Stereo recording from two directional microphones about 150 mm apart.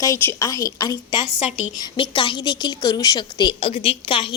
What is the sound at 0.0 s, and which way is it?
A woman's voice, 20° left (ahead or behind).